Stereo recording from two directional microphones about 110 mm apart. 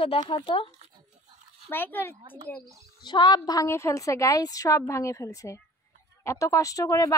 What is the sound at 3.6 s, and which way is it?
A woman's voice, 25° left (ahead or behind).